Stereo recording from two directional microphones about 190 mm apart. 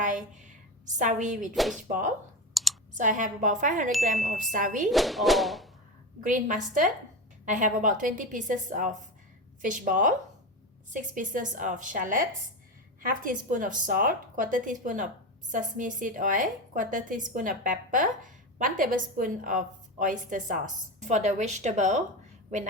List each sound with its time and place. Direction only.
0.0 s a sound: 40° right (ahead or behind)
0.9 s a woman's voice: 40° right (ahead or behind)
1.5 s speech: centre (ahead or behind)
1.9 s a woman's voice: 45° right (ahead or behind)
2.5 s computer keyboard: centre (ahead or behind)
2.9 s a woman's voice: 40° right (ahead or behind)
4.9 s speech: centre (ahead or behind)
6.2 s a woman's voice: 45° right (ahead or behind)